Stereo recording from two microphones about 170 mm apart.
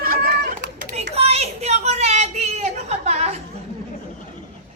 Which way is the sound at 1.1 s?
35° right (ahead or behind).